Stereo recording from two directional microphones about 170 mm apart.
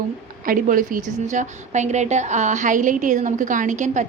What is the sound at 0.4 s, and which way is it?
A woman's voice, 55° right (ahead or behind).